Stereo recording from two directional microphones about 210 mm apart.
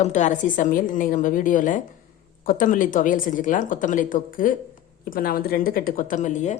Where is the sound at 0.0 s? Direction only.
35° left (ahead or behind).